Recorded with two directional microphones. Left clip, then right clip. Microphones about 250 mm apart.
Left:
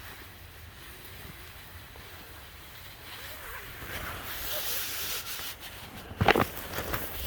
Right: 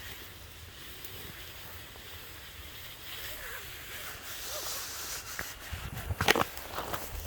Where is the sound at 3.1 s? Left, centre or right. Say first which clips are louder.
Even; centre.